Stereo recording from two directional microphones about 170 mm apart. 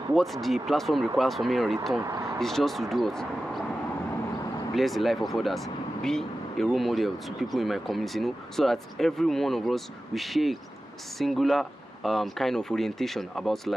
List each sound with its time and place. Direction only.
0.1 s speech: centre (ahead or behind)
2.0 s speech: 15° right (ahead or behind)
2.4 s speech: centre (ahead or behind)
4.7 s speech: centre (ahead or behind)